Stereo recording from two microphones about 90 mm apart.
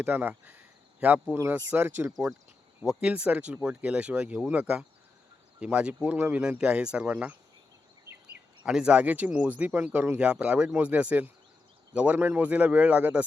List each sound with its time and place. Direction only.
0.0 s speech: 20° right (ahead or behind)
8.6 s speech: 10° right (ahead or behind)